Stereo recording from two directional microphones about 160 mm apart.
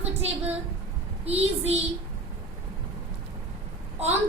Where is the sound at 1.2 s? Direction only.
40° right (ahead or behind).